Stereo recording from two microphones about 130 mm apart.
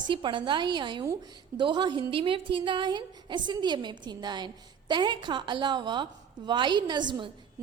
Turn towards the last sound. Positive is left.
turn(degrees=-35)  # may be behind; listen again after turning